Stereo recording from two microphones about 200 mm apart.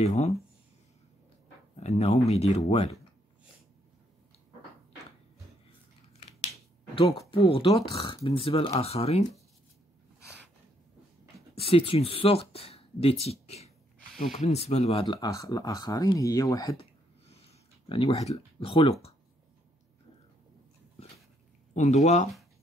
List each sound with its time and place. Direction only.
0.0 s speech: 35° left (ahead or behind)
1.8 s speech: 30° left (ahead or behind)
7.0 s speech: 25° left (ahead or behind)
11.5 s speech: 25° left (ahead or behind)
17.3 s a sound: 30° left (ahead or behind)
21.7 s speech: 35° left (ahead or behind)